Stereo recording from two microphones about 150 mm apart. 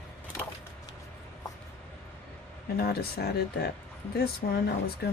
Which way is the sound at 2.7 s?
90° left.